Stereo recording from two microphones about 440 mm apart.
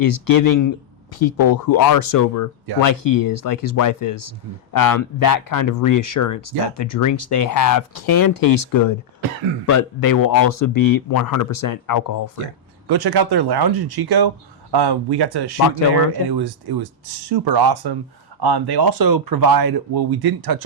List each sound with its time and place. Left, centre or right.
0.0 s speech: left
12.9 s speech: right